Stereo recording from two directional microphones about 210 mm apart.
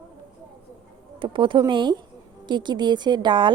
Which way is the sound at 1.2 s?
25° right (ahead or behind).